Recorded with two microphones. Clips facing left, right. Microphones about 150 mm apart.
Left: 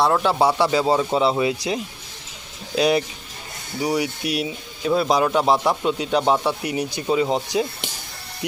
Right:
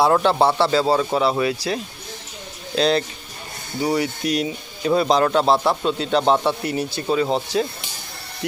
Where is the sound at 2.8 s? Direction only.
10° left (ahead or behind).